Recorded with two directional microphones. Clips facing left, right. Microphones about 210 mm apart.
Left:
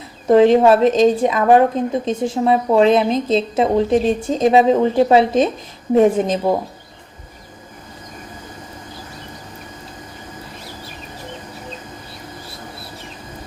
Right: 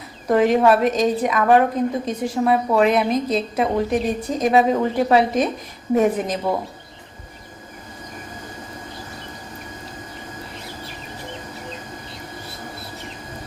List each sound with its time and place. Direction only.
0.3 s a woman's voice: 25° left (ahead or behind)